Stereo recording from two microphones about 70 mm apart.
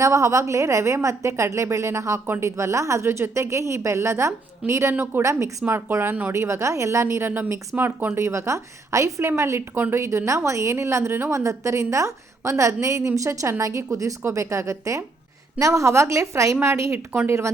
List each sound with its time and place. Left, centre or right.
0.0 s a woman's voice: right
5.2 s a woman's voice: right